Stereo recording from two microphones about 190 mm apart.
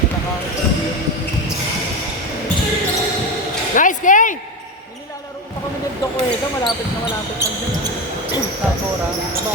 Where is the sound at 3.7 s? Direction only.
45° left (ahead or behind).